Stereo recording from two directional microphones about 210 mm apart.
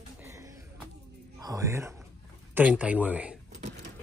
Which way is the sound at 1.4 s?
15° right (ahead or behind).